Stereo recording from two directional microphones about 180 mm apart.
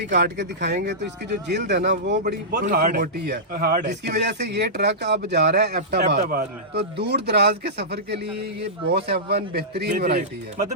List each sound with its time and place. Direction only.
0.2 s speech: 75° right (ahead or behind)
2.6 s speech: 45° right (ahead or behind); by 10.2 s 65° right (ahead or behind)
10.2 s speech: 45° right (ahead or behind)